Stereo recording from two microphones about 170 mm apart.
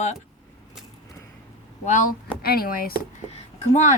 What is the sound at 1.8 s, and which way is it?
Speech, 45° left (ahead or behind).